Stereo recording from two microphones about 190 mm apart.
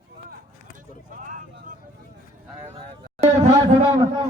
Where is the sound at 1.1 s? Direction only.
45° right (ahead or behind).